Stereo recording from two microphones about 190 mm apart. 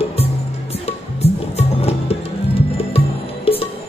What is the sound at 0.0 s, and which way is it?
Music, 30° left (ahead or behind).